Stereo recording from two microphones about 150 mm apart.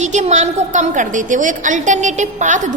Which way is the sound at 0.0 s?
50° right (ahead or behind).